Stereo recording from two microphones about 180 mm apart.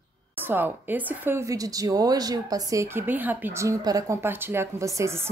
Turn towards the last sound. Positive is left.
turn(degrees=-15)  # may be behind; listen again after turning